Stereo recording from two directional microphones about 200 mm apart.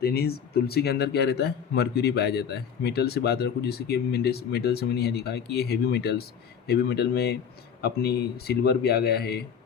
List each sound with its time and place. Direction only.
0.0 s speech: 50° left (ahead or behind)